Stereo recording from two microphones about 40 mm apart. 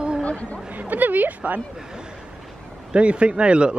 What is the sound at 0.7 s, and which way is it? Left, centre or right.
Speech, right.